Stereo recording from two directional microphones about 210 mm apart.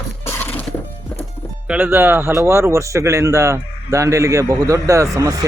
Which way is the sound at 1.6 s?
5° right (ahead or behind).